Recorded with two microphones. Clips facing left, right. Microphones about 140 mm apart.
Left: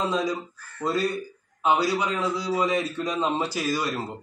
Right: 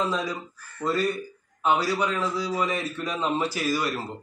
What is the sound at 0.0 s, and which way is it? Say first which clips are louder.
A man's voice: left 2 dB; 20° left (ahead or behind).